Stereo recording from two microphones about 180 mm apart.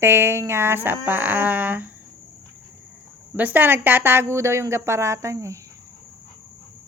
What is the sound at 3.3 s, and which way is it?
A woman's voice, 10° right (ahead or behind).